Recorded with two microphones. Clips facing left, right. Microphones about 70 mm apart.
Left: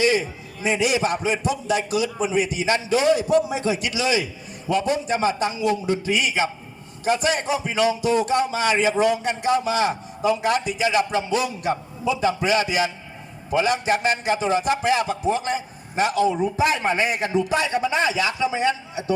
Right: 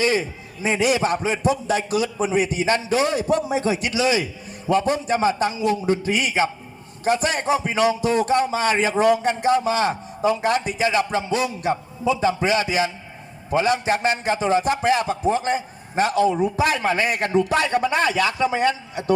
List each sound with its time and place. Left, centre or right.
0.0 s a man's voice: right
16.4 s speech: right
16.8 s speech: right